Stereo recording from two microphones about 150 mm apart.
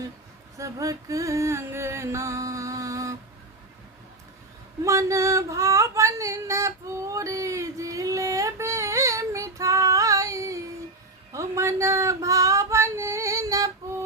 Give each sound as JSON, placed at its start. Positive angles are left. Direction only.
{"t": 0.6, "sound": "music", "side_deg": -20}
{"t": 4.8, "sound": "female singing", "side_deg": -20}